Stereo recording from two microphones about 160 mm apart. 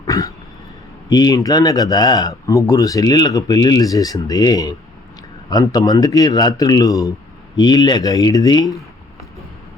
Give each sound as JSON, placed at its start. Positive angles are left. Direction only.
{"t": 0.1, "sound": "throat clearing", "side_deg": 20}
{"t": 1.1, "sound": "speech", "side_deg": 25}